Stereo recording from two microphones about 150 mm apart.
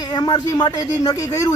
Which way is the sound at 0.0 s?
25° left (ahead or behind).